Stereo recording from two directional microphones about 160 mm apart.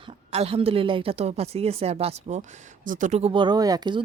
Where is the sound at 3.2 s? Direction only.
30° right (ahead or behind).